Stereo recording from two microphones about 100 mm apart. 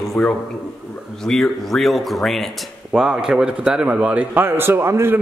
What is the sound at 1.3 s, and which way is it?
A man's voice, 5° left (ahead or behind).